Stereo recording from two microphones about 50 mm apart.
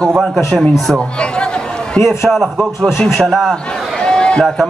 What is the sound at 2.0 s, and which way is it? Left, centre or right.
Speech, centre.